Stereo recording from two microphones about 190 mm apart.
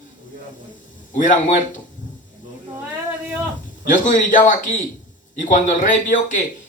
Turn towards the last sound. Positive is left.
turn(degrees=40)  # may be behind; listen again after turning